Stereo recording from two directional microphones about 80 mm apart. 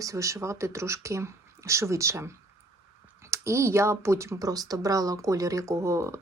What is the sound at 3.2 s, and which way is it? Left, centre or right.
Speech, right.